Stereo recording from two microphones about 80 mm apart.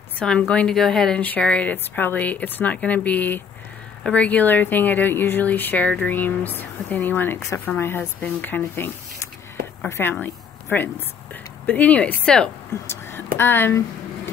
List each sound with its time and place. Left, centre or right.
0.5 s speech: centre
1.2 s speech: centre
10.2 s a sound: left
11.6 s speech: centre
12.8 s speech: left